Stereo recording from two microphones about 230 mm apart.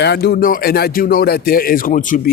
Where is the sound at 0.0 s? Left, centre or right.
Left.